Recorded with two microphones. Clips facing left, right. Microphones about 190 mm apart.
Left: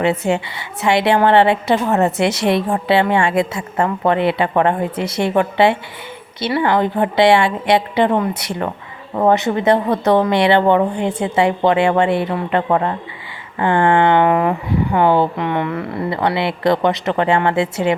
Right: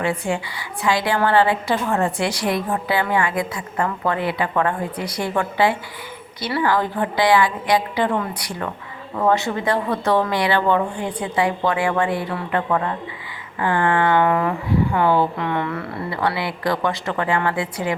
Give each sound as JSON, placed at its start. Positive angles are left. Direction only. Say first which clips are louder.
{"t": 0.0, "sound": "a woman's voice", "louder": "left 6 dB", "side_deg": 25}